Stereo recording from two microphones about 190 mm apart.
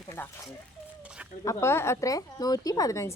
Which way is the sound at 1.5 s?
15° left (ahead or behind).